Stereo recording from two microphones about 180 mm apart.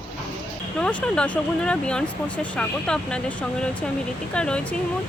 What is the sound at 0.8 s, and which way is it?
Speech, 5° left (ahead or behind).